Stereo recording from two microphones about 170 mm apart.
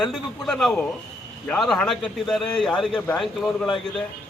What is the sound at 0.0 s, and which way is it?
Speech, 5° left (ahead or behind).